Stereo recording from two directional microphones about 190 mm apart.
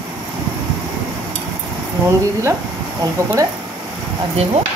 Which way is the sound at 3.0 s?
15° right (ahead or behind).